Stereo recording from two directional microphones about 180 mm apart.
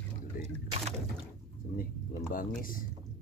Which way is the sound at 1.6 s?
55° left (ahead or behind).